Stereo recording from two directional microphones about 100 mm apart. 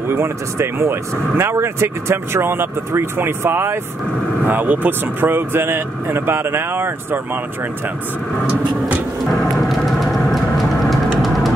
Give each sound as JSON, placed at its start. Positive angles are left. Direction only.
{"t": 0.1, "sound": "speech", "side_deg": -25}
{"t": 9.2, "sound": "vehicle", "side_deg": 0}